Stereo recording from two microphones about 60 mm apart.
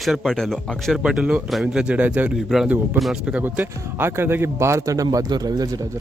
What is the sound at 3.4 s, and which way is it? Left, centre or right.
Speech, right.